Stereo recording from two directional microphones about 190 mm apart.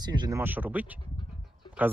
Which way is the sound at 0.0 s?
20° right (ahead or behind).